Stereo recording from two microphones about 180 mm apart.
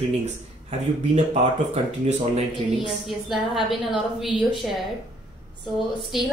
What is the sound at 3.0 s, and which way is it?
A woman's voice, centre (ahead or behind).